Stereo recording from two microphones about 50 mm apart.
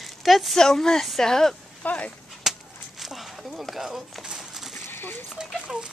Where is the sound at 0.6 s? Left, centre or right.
Centre.